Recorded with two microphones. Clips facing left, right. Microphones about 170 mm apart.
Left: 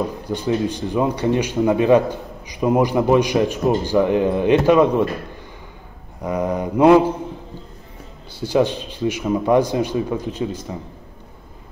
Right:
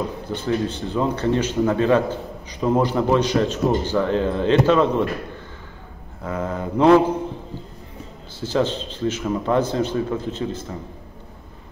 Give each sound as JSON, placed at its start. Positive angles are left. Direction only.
{"t": 0.3, "sound": "a man's voice", "side_deg": 15}
{"t": 6.2, "sound": "a man's voice", "side_deg": 15}
{"t": 8.4, "sound": "a man's voice", "side_deg": 15}